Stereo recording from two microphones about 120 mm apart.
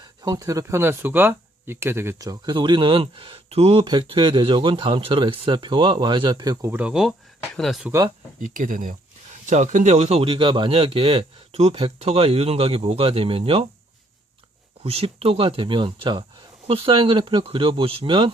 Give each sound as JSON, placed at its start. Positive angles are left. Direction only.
{"t": 0.0, "sound": "speech", "side_deg": -35}
{"t": 6.7, "sound": "speech", "side_deg": -10}
{"t": 8.4, "sound": "speech", "side_deg": -90}
{"t": 14.8, "sound": "speech", "side_deg": -55}